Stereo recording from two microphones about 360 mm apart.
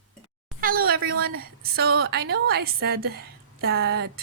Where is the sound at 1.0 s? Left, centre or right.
Right.